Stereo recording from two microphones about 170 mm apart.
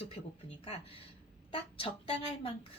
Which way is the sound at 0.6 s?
35° left (ahead or behind).